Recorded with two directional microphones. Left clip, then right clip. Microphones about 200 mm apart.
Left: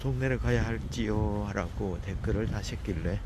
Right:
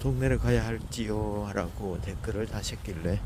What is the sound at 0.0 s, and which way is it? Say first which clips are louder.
Speech: right 2 dB; 25° right (ahead or behind).